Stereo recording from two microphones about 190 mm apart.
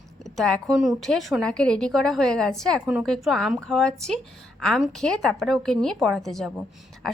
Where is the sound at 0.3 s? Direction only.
Centre (ahead or behind).